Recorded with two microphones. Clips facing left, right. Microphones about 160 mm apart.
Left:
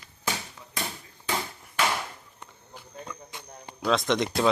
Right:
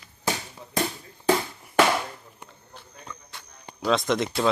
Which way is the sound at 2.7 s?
15° left (ahead or behind).